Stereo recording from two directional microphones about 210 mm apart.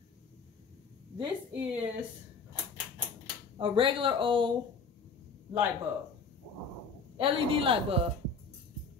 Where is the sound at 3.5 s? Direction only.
25° right (ahead or behind).